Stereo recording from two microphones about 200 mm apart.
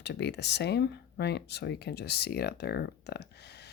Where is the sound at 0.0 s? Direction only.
60° left (ahead or behind).